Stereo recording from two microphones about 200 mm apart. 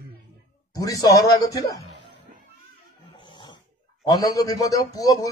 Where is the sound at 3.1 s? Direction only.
25° left (ahead or behind).